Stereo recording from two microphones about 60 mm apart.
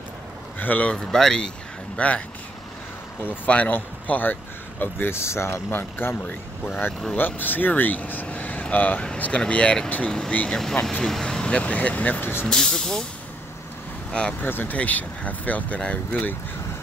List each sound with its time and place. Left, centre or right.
0.6 s speech: left
0.9 s speech: centre
2.0 s speech: left
3.4 s speech: left
6.2 s speech: left
12.2 s speech: left
12.4 s speech: centre
14.4 s speech: left